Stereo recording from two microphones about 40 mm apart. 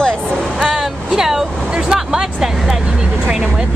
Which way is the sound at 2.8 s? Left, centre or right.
Right.